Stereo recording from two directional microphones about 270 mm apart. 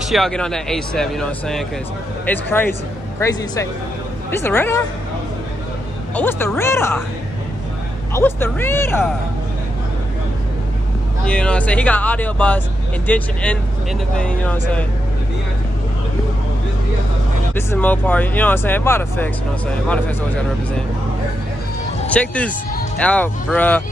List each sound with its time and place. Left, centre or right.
0.1 s speech: centre
6.1 s speech: centre
8.1 s speech: centre
11.2 s speech: centre
17.6 s speech: centre
22.1 s speech: centre